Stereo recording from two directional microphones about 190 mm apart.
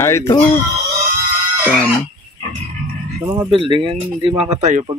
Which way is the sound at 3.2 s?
15° right (ahead or behind).